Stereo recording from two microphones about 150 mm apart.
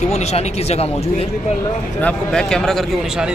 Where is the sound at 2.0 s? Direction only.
5° left (ahead or behind).